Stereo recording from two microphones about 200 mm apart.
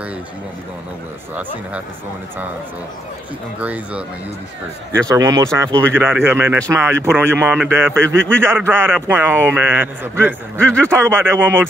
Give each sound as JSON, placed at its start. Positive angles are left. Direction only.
{"t": 3.5, "sound": "a man's voice", "side_deg": -5}
{"t": 10.6, "sound": "a man's voice", "side_deg": 5}
{"t": 10.9, "sound": "a man's voice", "side_deg": -10}